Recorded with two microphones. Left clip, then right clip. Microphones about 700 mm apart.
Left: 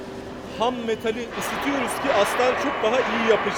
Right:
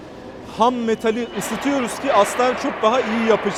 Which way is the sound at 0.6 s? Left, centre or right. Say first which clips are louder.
Right 6 dB; right.